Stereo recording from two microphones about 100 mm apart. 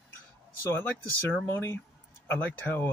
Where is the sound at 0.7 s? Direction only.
15° left (ahead or behind).